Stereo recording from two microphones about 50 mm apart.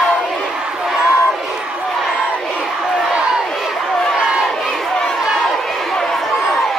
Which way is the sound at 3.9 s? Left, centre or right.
Centre.